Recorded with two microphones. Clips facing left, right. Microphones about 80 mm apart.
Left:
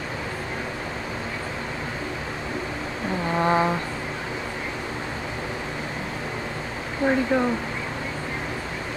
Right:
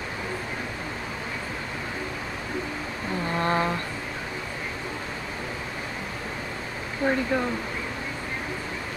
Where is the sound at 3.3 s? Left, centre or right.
Centre.